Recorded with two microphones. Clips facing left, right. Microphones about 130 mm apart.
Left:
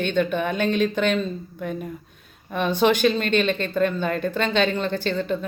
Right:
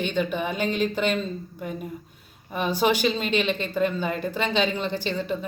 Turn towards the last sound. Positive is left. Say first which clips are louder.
# left 3 dB
turn(degrees=-10)  # may be behind; listen again after turning